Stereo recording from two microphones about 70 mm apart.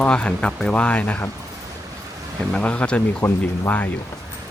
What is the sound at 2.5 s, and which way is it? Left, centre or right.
Speech, centre.